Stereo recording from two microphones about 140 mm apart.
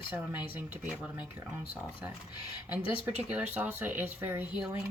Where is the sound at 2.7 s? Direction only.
10° right (ahead or behind).